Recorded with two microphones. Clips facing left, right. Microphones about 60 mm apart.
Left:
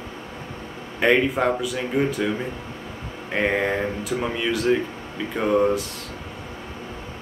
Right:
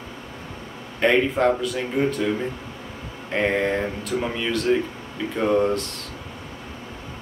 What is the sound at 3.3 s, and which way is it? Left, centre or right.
Speech, centre.